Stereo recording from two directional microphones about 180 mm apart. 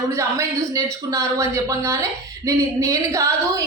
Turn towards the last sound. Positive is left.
turn(degrees=-15)  # may be behind; listen again after turning